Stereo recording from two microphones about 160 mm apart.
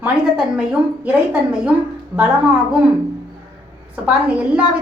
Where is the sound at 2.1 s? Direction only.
15° right (ahead or behind).